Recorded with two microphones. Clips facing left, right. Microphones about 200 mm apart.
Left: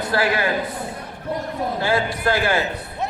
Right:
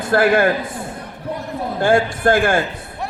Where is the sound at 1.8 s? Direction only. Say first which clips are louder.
Right 7 dB; 50° right (ahead or behind).